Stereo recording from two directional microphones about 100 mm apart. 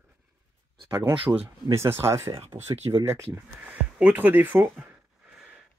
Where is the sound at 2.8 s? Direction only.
40° right (ahead or behind).